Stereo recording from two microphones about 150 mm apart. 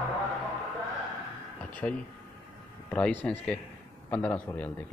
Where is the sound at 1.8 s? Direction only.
15° left (ahead or behind).